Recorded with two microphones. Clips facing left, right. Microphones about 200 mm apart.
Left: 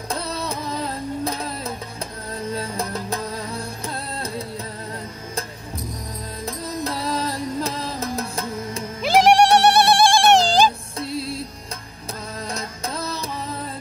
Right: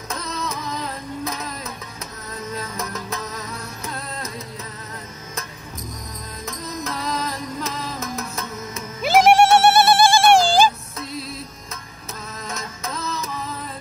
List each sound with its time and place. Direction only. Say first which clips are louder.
0.1 s music: left 2 dB; 35° left (ahead or behind)
6.4 s music: left 3 dB; 30° left (ahead or behind)
9.0 s music: right 1 dB; 5° right (ahead or behind)
11.0 s music: left 4 dB; 30° left (ahead or behind)